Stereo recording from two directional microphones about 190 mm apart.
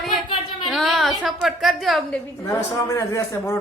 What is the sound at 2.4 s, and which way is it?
A man's voice, 15° left (ahead or behind).